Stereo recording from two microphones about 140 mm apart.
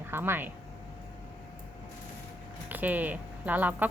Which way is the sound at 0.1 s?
15° right (ahead or behind).